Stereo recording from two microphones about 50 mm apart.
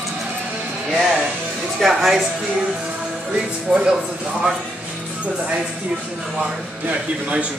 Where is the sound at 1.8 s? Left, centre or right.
Centre.